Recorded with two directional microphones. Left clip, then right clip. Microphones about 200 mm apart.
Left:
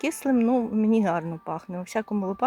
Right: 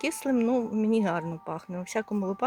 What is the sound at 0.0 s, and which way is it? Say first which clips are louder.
Speech: left 3 dB; 15° left (ahead or behind).